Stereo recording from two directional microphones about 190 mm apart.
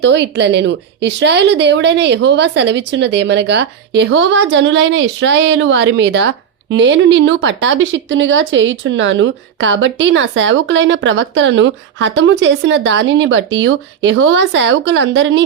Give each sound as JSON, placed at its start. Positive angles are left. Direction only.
{"t": 0.0, "sound": "speech", "side_deg": -65}